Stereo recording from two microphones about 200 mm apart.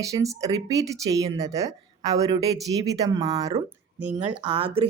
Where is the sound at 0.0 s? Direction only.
15° right (ahead or behind).